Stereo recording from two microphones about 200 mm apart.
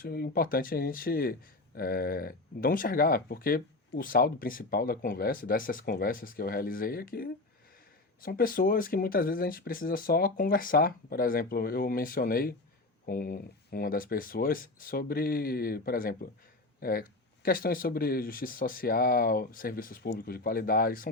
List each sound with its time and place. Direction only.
0.0 s speech: 50° left (ahead or behind)